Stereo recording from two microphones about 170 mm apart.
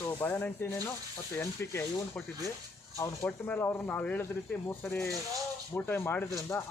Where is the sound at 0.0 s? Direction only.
10° left (ahead or behind).